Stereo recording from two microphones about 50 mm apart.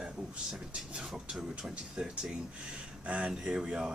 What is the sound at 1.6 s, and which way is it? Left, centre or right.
Speech, centre.